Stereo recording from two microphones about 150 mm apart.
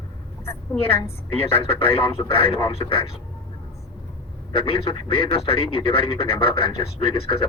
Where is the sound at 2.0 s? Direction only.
35° left (ahead or behind).